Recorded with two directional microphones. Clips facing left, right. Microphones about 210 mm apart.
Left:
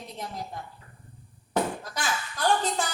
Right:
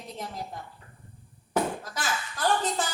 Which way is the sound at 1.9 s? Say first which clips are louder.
Left 1 dB; centre (ahead or behind).